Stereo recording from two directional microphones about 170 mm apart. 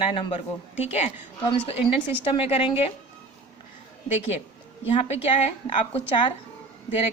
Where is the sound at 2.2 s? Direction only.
35° left (ahead or behind).